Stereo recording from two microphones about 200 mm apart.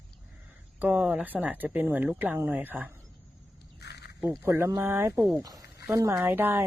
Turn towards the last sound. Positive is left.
turn(degrees=-10)  # may be behind; listen again after turning